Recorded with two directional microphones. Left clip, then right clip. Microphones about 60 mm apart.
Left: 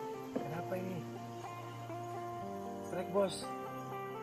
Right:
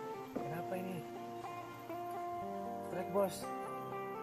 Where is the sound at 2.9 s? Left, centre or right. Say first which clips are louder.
Left 2 dB; centre.